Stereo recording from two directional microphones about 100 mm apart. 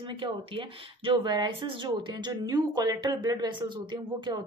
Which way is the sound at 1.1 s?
45° right (ahead or behind).